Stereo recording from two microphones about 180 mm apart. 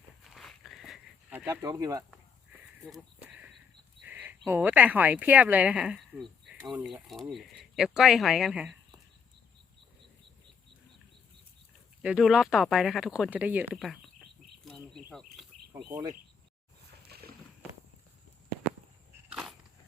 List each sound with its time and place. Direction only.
0.3 s walk: centre (ahead or behind)
1.5 s speech: 20° right (ahead or behind)
2.8 s a sound: 5° right (ahead or behind)
4.0 s speech: 10° right (ahead or behind)
12.0 s speech: 5° right (ahead or behind)
15.7 s speech: 10° right (ahead or behind)
17.1 s boat: 60° right (ahead or behind)
19.3 s a sound: 5° right (ahead or behind)